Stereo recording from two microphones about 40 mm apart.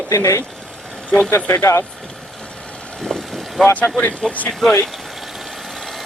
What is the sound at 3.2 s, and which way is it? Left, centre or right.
Vehicle, centre.